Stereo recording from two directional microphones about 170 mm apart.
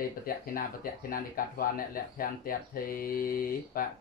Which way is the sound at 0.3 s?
60° left (ahead or behind).